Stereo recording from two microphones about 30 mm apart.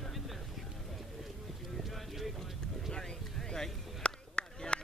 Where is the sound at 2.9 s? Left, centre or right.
Left.